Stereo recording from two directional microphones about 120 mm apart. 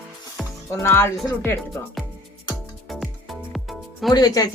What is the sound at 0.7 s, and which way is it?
Speech, 20° left (ahead or behind).